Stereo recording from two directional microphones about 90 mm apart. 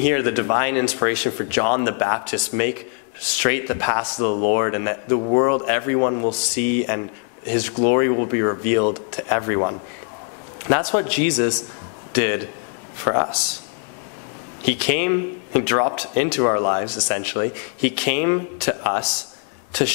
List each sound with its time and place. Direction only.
0.0 s a man's voice: 15° left (ahead or behind)
14.6 s a man's voice: 15° left (ahead or behind)